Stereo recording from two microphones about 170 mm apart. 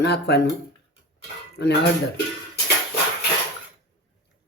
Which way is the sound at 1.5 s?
80° left.